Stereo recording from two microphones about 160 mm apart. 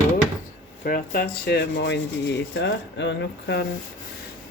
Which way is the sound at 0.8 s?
60° left (ahead or behind).